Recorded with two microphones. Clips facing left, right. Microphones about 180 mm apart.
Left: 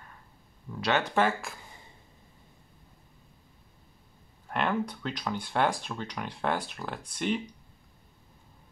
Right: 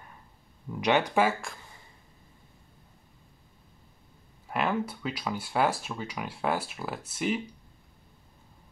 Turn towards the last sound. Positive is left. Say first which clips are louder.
# right 1 dB
turn(degrees=-5)  # may be behind; listen again after turning